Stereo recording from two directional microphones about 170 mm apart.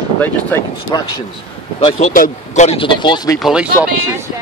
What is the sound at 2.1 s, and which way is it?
Speech, 50° left (ahead or behind).